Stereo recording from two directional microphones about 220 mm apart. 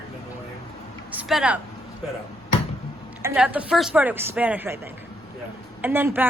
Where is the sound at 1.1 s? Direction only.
5° right (ahead or behind).